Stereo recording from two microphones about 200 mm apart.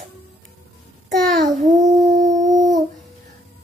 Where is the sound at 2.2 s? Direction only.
40° right (ahead or behind).